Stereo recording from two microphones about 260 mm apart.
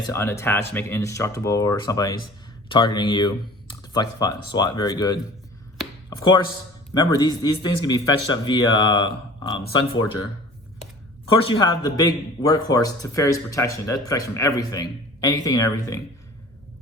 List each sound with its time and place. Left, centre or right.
0.0 s a man's voice: centre
11.3 s a man's voice: centre